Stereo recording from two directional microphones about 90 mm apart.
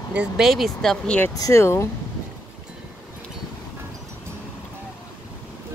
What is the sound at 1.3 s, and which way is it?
Speech, 45° left (ahead or behind).